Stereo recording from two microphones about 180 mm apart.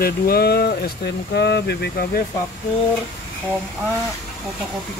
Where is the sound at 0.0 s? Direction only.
60° left (ahead or behind).